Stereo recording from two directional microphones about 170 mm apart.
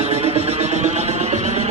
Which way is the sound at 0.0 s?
40° right (ahead or behind).